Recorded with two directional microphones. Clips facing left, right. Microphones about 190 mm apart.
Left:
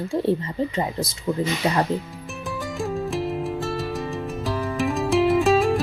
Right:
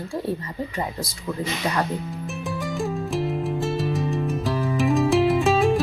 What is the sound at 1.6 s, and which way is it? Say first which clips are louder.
Speech: left 3 dB; 25° left (ahead or behind).